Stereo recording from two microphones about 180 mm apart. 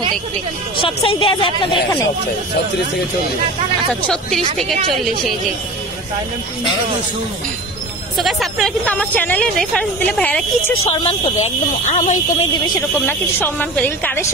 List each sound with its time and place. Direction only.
0.7 s a woman's voice: 30° left (ahead or behind)
4.6 s a woman's voice: centre (ahead or behind)
8.2 s a woman's voice: centre (ahead or behind)
10.9 s speech: 30° left (ahead or behind)
12.6 s a woman's voice: 20° left (ahead or behind)